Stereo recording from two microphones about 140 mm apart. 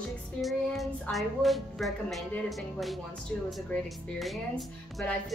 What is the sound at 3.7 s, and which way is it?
Speech, centre (ahead or behind).